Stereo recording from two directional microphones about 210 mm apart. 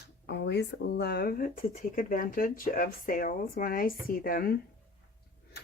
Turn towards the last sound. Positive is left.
turn(degrees=45)  # may be behind; listen again after turning